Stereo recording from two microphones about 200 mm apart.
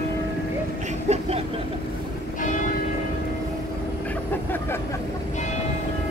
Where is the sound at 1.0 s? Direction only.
35° right (ahead or behind).